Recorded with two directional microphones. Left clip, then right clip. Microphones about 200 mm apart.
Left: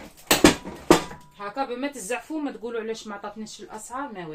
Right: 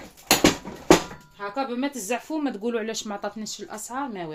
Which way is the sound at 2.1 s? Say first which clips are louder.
Right 3 dB; 50° right (ahead or behind).